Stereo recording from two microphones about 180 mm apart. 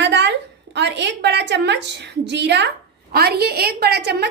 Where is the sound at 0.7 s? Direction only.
75° right (ahead or behind).